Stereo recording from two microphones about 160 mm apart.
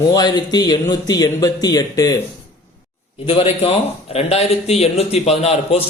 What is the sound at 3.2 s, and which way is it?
A man's voice, 35° left (ahead or behind).